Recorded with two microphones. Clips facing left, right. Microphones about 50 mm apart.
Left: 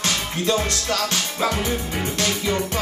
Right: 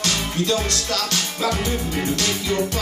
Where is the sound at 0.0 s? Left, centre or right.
Left.